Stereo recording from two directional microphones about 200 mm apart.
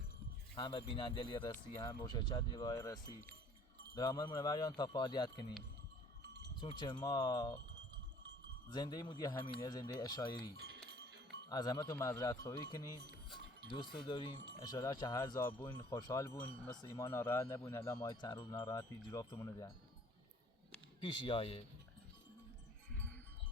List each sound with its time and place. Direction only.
0.5 s speech: 25° left (ahead or behind)
6.6 s speech: 25° left (ahead or behind)
8.7 s speech: 20° left (ahead or behind)
10.6 s goat: 55° right (ahead or behind)
11.4 s speech: 20° left (ahead or behind)
21.0 s speech: 25° left (ahead or behind)